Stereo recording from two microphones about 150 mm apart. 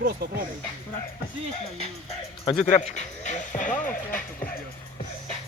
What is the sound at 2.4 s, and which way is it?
Speech, 40° left (ahead or behind).